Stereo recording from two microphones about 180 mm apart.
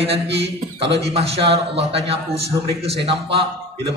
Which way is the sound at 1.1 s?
35° right (ahead or behind).